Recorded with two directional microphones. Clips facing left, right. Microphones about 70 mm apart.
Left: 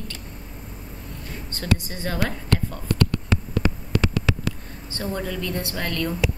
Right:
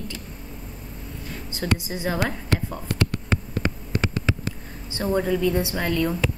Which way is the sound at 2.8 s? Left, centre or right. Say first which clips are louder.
Left 3 dB; left.